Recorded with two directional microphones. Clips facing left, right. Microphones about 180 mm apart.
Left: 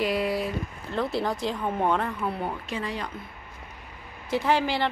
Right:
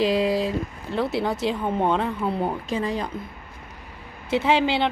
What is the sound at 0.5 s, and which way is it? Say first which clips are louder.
A woman's voice: right 5 dB; 10° right (ahead or behind).